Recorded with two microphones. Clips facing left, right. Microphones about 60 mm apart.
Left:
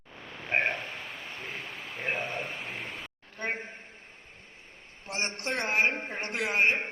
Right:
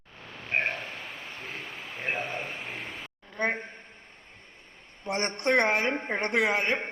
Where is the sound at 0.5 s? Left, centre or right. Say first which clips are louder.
Left 1 dB; left.